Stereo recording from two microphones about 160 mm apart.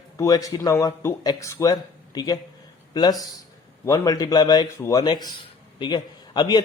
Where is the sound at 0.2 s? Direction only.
20° left (ahead or behind).